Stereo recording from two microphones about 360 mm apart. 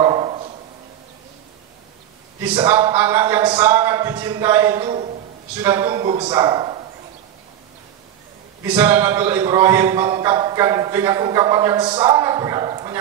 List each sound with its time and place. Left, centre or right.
0.0 s a sound: centre
2.4 s speech: centre
8.6 s speech: centre